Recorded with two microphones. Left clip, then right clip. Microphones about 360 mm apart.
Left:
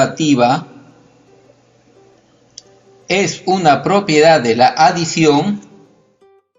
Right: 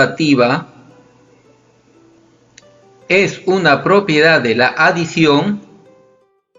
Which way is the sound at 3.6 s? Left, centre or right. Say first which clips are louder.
Right 1 dB; left.